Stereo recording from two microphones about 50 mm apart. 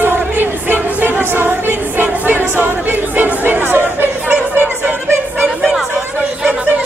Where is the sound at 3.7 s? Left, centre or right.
Right.